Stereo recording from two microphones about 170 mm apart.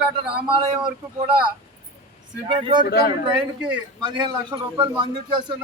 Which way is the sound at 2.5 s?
25° right (ahead or behind).